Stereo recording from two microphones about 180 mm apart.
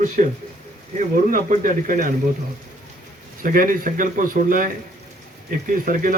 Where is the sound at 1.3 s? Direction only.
50° right (ahead or behind).